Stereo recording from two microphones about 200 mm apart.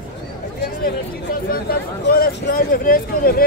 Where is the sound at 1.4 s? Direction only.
50° left (ahead or behind).